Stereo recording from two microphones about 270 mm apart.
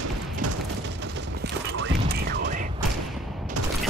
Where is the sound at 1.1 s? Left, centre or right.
Right.